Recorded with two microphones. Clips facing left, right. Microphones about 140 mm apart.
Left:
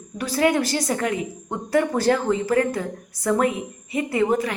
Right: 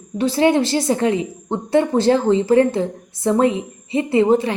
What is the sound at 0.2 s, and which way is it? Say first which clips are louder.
A woman's voice: right 5 dB; 25° right (ahead or behind).